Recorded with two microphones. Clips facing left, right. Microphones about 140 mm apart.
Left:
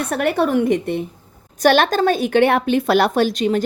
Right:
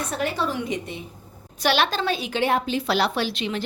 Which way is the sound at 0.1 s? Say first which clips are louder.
Left 10 dB; 60° left (ahead or behind).